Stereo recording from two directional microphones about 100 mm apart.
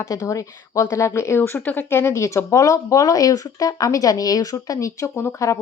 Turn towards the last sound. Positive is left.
turn(degrees=30)  # may be behind; listen again after turning